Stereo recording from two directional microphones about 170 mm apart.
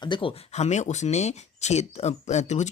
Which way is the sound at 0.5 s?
40° left (ahead or behind).